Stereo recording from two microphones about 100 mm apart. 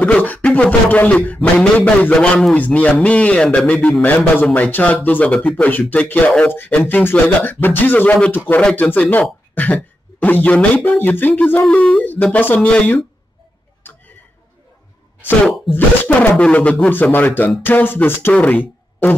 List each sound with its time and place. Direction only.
0.0 s speech: 15° left (ahead or behind)
15.7 s speech: 20° left (ahead or behind)
17.6 s music: 20° left (ahead or behind)
18.3 s speech: 15° left (ahead or behind)